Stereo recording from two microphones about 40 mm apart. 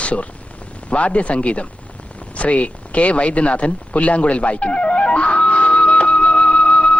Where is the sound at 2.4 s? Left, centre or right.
Left.